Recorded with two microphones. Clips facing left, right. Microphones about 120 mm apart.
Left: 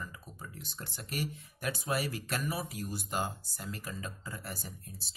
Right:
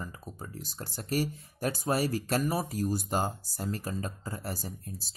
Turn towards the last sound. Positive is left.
turn(degrees=-40)  # may be behind; listen again after turning